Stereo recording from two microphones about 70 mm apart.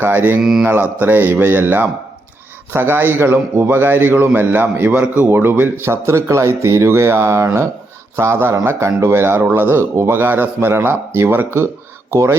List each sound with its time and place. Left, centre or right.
0.0 s a man's voice: right
4.9 s a man's voice: centre
5.3 s speech: right
12.1 s speech: right